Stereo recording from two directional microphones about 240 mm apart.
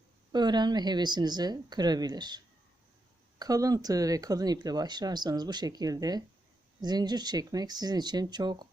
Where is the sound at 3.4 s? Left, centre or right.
Centre.